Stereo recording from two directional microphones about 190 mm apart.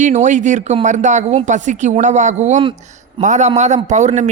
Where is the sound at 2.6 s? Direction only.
25° right (ahead or behind).